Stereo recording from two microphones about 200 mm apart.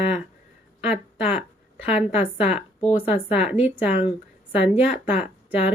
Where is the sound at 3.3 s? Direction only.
5° right (ahead or behind).